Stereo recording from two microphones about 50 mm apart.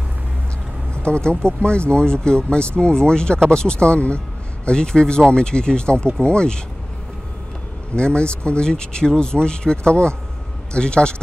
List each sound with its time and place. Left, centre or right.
1.0 s speech: left
7.9 s speech: left